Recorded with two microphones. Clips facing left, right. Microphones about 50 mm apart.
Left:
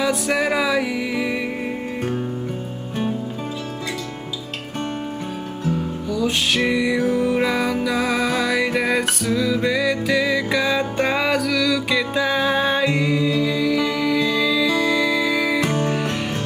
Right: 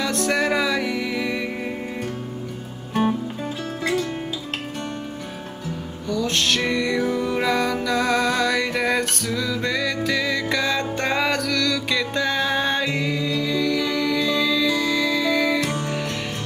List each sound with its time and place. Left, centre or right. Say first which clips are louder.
0.0 s music: left 2 dB; centre
6.0 s music: even; centre
15.6 s music: left 4 dB; left